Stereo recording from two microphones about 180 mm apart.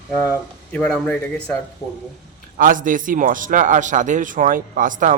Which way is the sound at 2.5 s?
50° right (ahead or behind).